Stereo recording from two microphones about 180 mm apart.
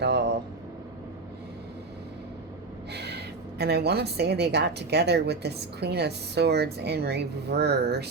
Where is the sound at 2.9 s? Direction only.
70° right (ahead or behind).